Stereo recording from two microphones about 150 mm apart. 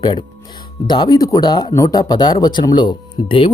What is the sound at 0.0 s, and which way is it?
Speech, 35° left (ahead or behind).